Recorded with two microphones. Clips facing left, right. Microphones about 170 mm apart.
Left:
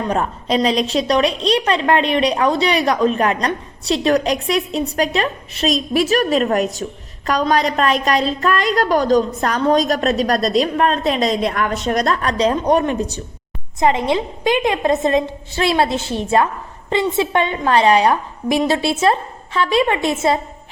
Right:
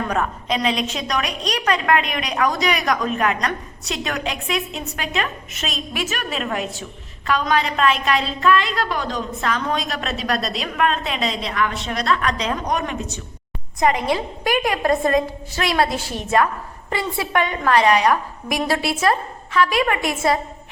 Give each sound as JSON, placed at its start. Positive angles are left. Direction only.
{"t": 0.0, "sound": "a woman's voice", "side_deg": 30}